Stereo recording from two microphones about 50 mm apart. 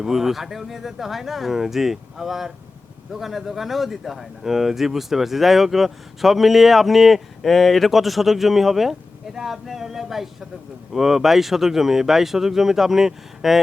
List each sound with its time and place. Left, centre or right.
0.0 s speech: centre